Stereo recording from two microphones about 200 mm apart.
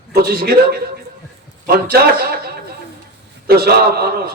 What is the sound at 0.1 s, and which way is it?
A man's voice, 50° right (ahead or behind).